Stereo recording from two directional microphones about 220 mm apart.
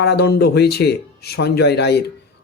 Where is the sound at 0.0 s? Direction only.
50° left (ahead or behind).